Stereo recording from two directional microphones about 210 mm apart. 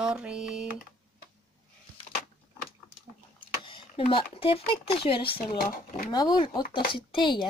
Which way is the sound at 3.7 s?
25° left (ahead or behind).